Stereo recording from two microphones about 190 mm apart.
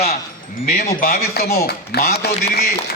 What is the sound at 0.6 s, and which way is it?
A man's voice, 55° left (ahead or behind).